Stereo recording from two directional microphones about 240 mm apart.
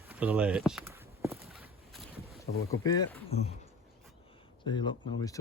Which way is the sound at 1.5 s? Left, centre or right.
Centre.